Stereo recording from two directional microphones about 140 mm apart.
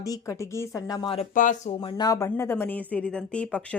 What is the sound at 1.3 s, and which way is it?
Speech, 70° left (ahead or behind).